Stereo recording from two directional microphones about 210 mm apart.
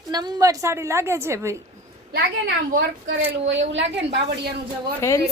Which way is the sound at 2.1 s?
50° right (ahead or behind).